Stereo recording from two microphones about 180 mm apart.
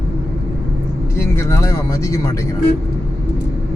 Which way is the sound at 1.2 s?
15° left (ahead or behind).